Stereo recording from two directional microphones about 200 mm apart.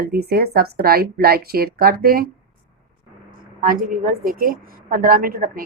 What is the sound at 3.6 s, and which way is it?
Speech, 45° right (ahead or behind).